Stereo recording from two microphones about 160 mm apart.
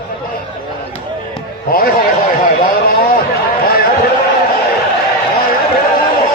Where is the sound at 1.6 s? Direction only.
70° left (ahead or behind).